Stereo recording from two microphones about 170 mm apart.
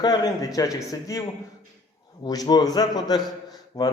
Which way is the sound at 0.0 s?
25° left (ahead or behind).